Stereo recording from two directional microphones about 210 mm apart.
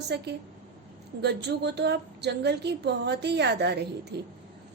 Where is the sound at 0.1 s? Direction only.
50° right (ahead or behind).